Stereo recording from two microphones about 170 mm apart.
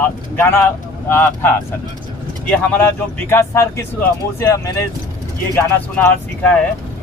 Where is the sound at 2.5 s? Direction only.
10° left (ahead or behind).